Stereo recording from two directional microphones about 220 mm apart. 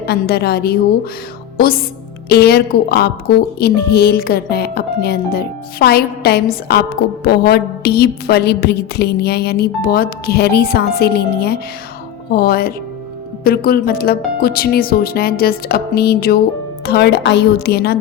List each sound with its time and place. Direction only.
0.0 s a woman's voice: 45° left (ahead or behind)